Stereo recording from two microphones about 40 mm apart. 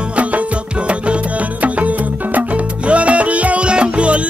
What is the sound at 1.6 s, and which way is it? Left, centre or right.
Music, right.